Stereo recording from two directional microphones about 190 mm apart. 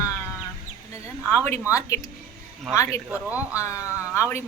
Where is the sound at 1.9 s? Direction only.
10° left (ahead or behind).